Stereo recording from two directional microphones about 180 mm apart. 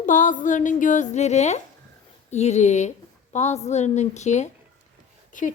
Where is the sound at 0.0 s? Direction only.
45° left (ahead or behind).